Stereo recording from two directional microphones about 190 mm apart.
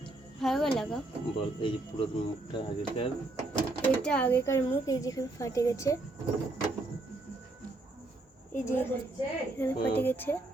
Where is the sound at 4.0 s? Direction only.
5° left (ahead or behind).